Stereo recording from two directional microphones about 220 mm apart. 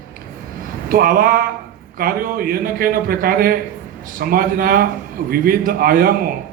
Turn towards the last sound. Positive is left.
turn(degrees=-40)  # may be behind; listen again after turning